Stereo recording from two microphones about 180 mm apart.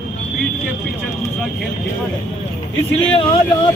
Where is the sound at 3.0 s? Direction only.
30° left (ahead or behind).